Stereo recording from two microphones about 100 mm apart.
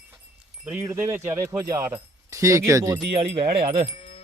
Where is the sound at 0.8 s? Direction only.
30° right (ahead or behind).